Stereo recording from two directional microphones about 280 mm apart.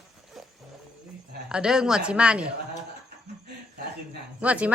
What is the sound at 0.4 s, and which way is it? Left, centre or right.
Wild animals, centre.